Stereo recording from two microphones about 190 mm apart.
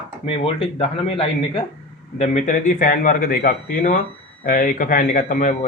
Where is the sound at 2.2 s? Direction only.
40° left (ahead or behind).